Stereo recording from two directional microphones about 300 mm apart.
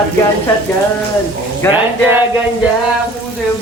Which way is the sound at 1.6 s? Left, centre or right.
Centre.